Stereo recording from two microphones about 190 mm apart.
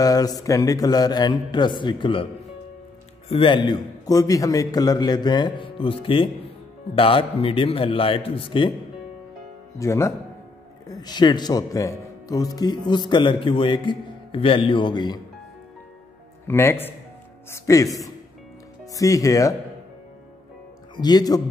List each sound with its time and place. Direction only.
0.0 s a man's voice: 20° left (ahead or behind)
3.3 s a man's voice: 30° left (ahead or behind)
9.8 s a man's voice: 15° left (ahead or behind)
16.4 s speech: 15° left (ahead or behind)
18.9 s speech: 15° left (ahead or behind)
20.9 s a man's voice: 20° left (ahead or behind)